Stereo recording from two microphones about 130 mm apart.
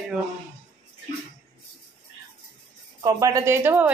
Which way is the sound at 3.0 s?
30° right (ahead or behind).